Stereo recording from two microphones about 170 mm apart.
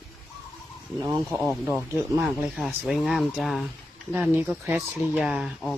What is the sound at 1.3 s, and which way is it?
Speech, 5° right (ahead or behind).